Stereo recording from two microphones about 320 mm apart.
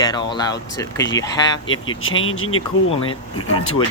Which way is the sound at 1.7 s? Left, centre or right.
Left.